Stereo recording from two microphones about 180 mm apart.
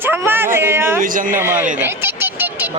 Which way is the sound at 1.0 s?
50° right (ahead or behind).